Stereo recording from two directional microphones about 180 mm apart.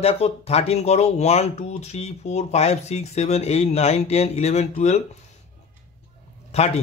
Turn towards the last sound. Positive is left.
turn(degrees=35)  # may be behind; listen again after turning